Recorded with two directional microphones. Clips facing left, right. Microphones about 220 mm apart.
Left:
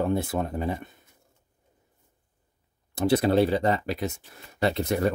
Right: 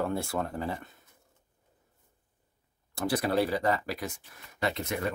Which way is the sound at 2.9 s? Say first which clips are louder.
Left 7 dB; 25° left (ahead or behind).